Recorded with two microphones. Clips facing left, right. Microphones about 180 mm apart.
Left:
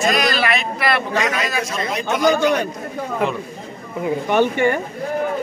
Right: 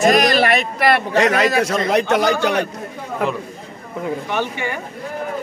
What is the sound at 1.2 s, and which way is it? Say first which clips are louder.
Speech: right 6 dB; 65° right (ahead or behind).